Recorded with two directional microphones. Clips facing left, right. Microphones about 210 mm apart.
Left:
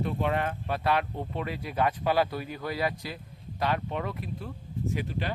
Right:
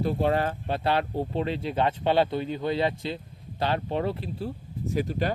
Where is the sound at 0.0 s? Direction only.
35° right (ahead or behind).